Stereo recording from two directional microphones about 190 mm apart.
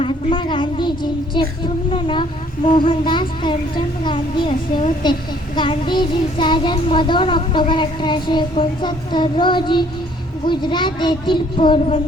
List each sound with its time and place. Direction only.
0.0 s child singing: 25° left (ahead or behind)